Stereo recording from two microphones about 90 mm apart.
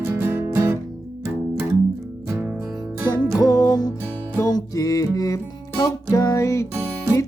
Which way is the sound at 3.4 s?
45° left (ahead or behind).